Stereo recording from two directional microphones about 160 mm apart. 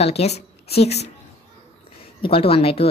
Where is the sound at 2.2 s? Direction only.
35° left (ahead or behind).